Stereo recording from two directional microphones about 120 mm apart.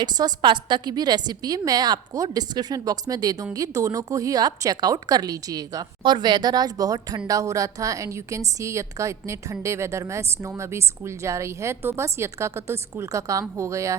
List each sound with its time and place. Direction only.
0.0 s a woman's voice: 35° right (ahead or behind)
6.0 s a woman's voice: 40° right (ahead or behind); by 13.9 s 25° right (ahead or behind)